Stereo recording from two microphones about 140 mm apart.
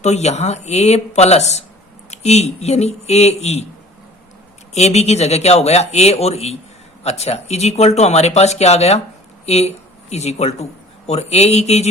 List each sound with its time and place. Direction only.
0.0 s speech: 55° left (ahead or behind)
4.7 s speech: 50° left (ahead or behind)